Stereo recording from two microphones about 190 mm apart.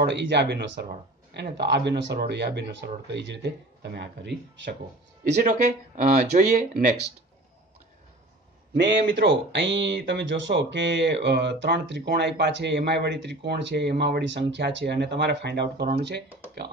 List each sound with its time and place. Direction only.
0.0 s speech: 65° right (ahead or behind)
5.4 s speech: 40° right (ahead or behind)
8.7 s speech: 70° right (ahead or behind)